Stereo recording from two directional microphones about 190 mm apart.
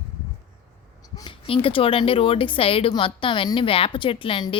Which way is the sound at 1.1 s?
25° left (ahead or behind).